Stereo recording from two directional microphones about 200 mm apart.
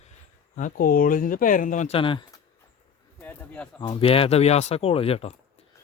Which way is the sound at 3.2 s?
5° left (ahead or behind).